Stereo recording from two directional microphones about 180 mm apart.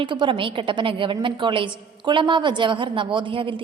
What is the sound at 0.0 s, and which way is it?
A woman's voice, 25° right (ahead or behind).